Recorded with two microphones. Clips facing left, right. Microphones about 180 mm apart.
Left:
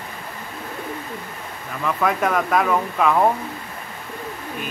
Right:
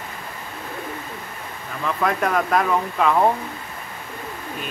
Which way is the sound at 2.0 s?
Centre (ahead or behind).